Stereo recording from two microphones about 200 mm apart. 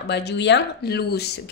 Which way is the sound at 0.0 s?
60° left (ahead or behind).